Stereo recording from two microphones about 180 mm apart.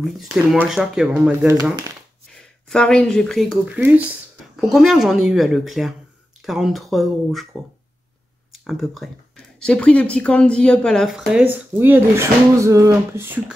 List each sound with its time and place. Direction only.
0.5 s speech: centre (ahead or behind)
1.5 s speech: 20° right (ahead or behind)
2.7 s speech: 5° left (ahead or behind)
8.6 s speech: centre (ahead or behind)